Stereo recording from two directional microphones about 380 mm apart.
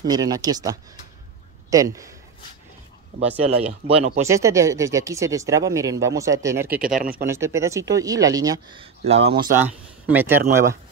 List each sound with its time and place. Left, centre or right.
0.0 s speech: centre
3.2 s speech: centre
7.0 s speech: right
7.2 s speech: centre